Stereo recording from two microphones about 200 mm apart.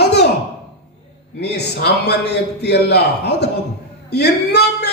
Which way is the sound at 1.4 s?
55° left (ahead or behind).